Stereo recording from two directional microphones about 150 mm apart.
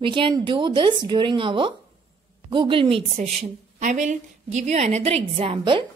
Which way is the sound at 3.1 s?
50° right (ahead or behind).